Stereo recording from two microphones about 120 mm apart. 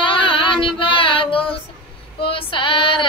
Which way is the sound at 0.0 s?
45° left (ahead or behind).